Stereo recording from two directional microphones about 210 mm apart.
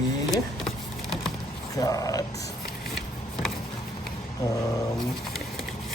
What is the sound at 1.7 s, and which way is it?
Speech, 15° left (ahead or behind).